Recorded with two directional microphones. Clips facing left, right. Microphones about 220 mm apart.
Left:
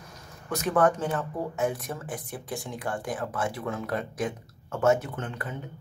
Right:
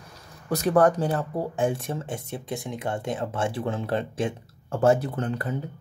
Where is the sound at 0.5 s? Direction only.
35° right (ahead or behind).